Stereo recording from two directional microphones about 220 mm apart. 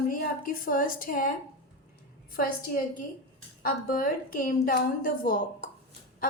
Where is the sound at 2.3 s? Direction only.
40° left (ahead or behind).